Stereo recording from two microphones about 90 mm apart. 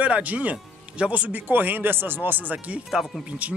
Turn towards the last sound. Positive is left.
turn(degrees=-15)  # may be behind; listen again after turning